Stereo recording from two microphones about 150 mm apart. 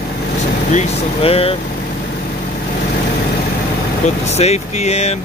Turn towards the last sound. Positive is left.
turn(degrees=45)  # may be behind; listen again after turning